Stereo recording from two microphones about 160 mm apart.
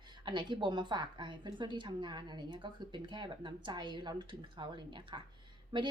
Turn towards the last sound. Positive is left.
turn(degrees=-30)  # may be behind; listen again after turning